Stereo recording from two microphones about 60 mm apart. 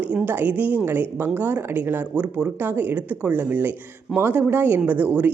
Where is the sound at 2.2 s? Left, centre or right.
Right.